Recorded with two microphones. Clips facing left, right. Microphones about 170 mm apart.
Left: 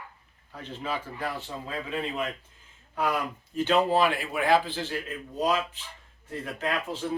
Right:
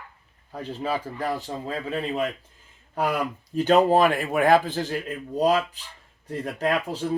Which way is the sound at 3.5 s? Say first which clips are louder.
Right 5 dB; 40° right (ahead or behind).